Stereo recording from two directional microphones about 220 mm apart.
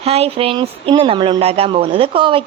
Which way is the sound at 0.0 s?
25° right (ahead or behind).